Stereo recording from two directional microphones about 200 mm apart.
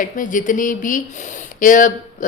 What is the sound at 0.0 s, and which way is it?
A woman's voice, 40° left (ahead or behind).